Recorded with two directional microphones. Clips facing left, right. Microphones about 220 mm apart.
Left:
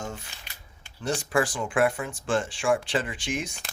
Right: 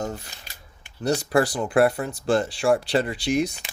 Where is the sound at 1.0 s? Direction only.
40° right (ahead or behind).